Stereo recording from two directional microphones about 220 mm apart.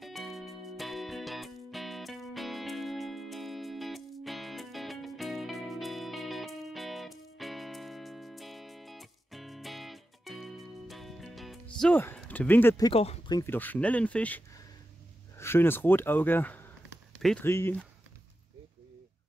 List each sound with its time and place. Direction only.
0.0 s music: centre (ahead or behind); by 13.0 s 15° left (ahead or behind)
13.0 s speech: 30° left (ahead or behind)
13.4 s speech: 10° left (ahead or behind)